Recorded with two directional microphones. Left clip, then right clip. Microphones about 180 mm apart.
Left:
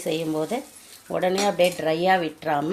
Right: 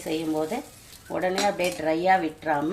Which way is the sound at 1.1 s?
55° left (ahead or behind).